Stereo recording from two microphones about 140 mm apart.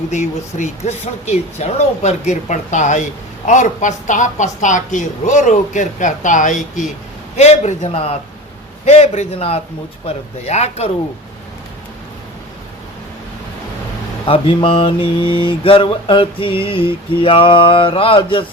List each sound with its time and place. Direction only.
0.1 s speech: 60° left (ahead or behind)
7.3 s speech: 50° left (ahead or behind)
14.3 s mantra: 40° left (ahead or behind)